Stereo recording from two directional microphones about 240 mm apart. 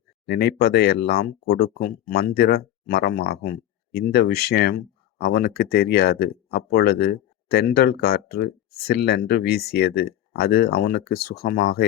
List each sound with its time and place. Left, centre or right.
0.3 s speech: left